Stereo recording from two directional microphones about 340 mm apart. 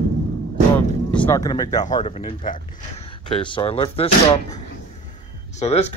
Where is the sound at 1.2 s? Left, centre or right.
Centre.